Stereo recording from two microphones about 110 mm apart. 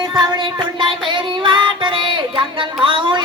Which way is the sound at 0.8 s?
50° right (ahead or behind).